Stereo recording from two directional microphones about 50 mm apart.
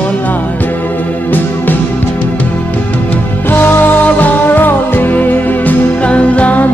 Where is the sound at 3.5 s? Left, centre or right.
Left.